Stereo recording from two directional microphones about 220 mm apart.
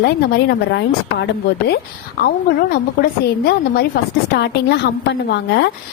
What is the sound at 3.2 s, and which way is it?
A woman's voice, 45° left (ahead or behind).